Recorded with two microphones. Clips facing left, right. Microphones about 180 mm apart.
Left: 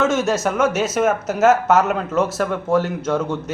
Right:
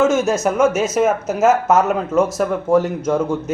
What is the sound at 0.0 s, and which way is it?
A man's voice, centre (ahead or behind).